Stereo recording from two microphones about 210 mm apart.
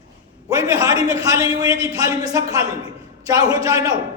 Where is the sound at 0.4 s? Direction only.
15° right (ahead or behind).